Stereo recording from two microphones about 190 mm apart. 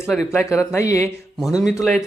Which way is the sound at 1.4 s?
Centre (ahead or behind).